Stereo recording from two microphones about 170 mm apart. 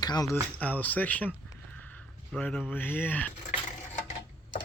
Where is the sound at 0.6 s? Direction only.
10° left (ahead or behind).